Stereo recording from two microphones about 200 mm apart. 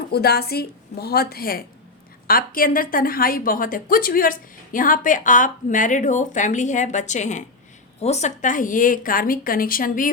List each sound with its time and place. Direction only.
0.1 s a woman's voice: 50° left (ahead or behind)